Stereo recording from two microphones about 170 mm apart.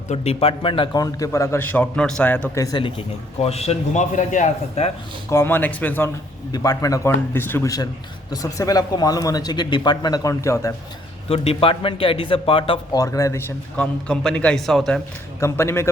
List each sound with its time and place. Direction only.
0.1 s a man's voice: 35° left (ahead or behind); by 2.6 s 10° left (ahead or behind)
3.4 s a man's voice: 40° left (ahead or behind)
5.3 s a man's voice: 15° left (ahead or behind)
6.5 s speech: 20° left (ahead or behind)
11.3 s a man's voice: 35° left (ahead or behind); by 13.4 s 20° left (ahead or behind)
13.7 s a man's voice: 5° left (ahead or behind)
15.4 s a man's voice: 15° left (ahead or behind)